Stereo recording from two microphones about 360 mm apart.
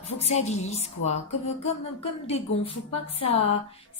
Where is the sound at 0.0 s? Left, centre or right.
Centre.